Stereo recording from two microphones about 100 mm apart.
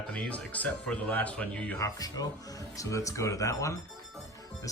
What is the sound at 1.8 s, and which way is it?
Speech, 35° left (ahead or behind).